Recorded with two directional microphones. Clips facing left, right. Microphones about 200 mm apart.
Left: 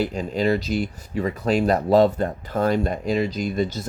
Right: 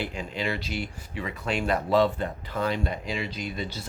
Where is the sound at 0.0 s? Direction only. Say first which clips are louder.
Left 9 dB; 40° left (ahead or behind).